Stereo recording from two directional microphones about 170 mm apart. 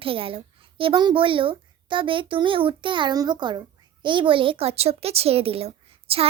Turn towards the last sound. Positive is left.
turn(degrees=-35)  # may be behind; listen again after turning